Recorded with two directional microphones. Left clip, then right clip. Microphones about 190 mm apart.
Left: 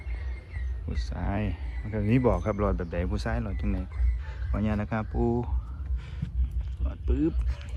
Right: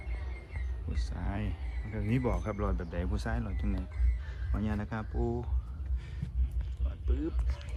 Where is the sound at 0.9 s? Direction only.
15° right (ahead or behind).